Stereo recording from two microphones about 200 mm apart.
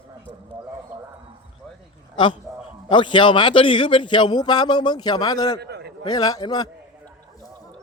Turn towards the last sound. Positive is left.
turn(degrees=20)  # may be behind; listen again after turning